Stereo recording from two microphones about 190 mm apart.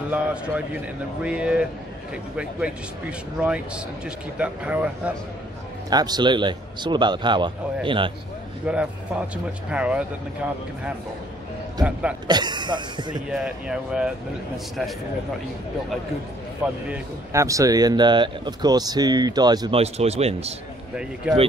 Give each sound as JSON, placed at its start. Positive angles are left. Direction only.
{"t": 0.1, "sound": "speech", "side_deg": -5}
{"t": 5.9, "sound": "speech", "side_deg": -20}
{"t": 8.6, "sound": "speech", "side_deg": -5}
{"t": 11.8, "sound": "speech", "side_deg": -5}
{"t": 12.3, "sound": "speech", "side_deg": -25}
{"t": 13.3, "sound": "speech", "side_deg": -5}
{"t": 16.9, "sound": "speech", "side_deg": -15}
{"t": 19.8, "sound": "speech", "side_deg": -35}
{"t": 21.3, "sound": "speech", "side_deg": -10}